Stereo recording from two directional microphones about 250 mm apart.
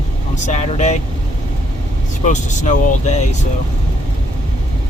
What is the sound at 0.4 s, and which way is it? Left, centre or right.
Speech, left.